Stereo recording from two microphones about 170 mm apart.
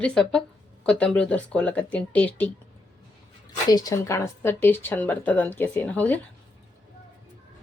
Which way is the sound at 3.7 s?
20° left (ahead or behind).